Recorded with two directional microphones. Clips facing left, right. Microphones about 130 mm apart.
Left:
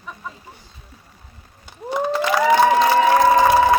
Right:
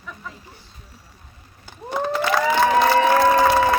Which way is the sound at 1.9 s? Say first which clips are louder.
Left 2 dB; 10° left (ahead or behind).